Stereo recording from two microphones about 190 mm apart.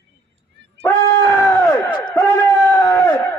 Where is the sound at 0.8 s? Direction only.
15° left (ahead or behind).